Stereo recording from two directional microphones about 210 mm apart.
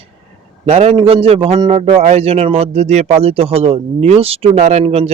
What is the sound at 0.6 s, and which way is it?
Speech, 30° right (ahead or behind).